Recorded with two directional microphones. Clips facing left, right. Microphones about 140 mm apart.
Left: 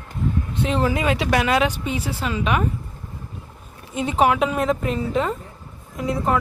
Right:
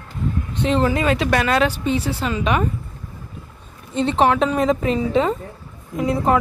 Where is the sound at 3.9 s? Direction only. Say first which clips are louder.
Right 2 dB; 10° left (ahead or behind).